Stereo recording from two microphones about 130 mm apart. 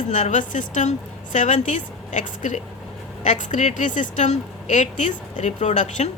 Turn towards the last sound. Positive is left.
turn(degrees=65)  # may be behind; listen again after turning